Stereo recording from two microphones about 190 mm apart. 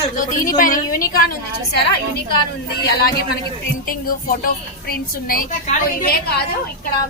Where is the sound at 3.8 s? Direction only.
50° left (ahead or behind).